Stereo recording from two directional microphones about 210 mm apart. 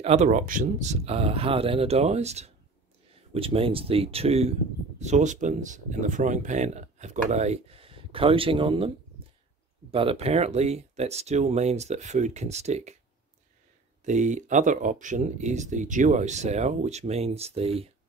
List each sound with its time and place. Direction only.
0.0 s speech: 30° right (ahead or behind)
14.0 s speech: 35° right (ahead or behind)